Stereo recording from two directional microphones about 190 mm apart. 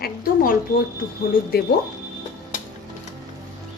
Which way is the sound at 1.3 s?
50° left (ahead or behind).